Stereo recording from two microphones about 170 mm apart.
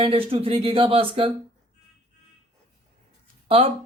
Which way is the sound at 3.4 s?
35° right (ahead or behind).